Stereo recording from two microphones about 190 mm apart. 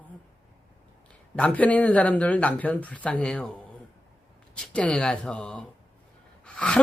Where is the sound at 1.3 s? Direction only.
5° left (ahead or behind).